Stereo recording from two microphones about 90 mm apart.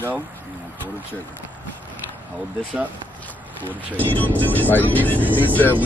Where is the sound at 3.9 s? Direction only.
20° left (ahead or behind).